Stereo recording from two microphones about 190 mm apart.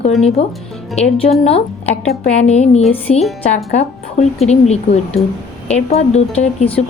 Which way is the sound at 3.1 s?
35° left (ahead or behind).